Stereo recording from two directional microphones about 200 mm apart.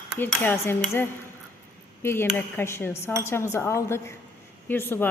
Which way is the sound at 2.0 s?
10° left (ahead or behind).